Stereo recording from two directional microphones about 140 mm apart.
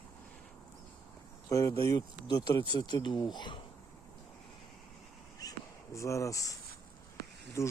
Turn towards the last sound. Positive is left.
turn(degrees=20)  # may be behind; listen again after turning